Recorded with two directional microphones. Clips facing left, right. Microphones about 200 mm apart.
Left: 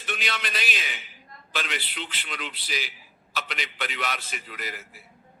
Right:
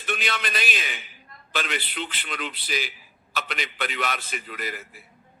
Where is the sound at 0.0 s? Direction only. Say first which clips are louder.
Right 3 dB; 50° right (ahead or behind).